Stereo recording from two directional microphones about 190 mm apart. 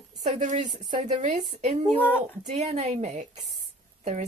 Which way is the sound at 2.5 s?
35° right (ahead or behind).